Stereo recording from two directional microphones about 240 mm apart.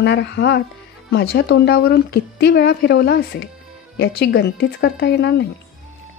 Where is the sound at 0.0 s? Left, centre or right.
Left.